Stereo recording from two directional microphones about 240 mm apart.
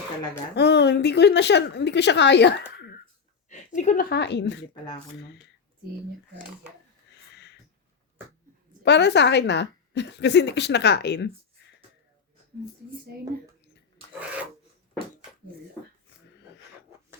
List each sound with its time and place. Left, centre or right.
0.5 s a woman's voice: left
3.8 s a woman's voice: left
8.8 s a woman's voice: left
11.6 s a sound: left